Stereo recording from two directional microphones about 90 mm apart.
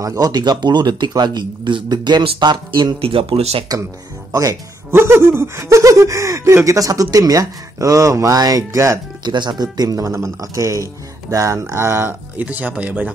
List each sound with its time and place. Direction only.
0.0 s a man's voice: 40° right (ahead or behind)
3.0 s speech: 90° right
4.3 s speech: 40° right (ahead or behind)
4.9 s speech: 25° right (ahead or behind)
9.2 s speech: 55° right (ahead or behind); by 12.4 s 25° right (ahead or behind)
12.4 s speech: 15° right (ahead or behind)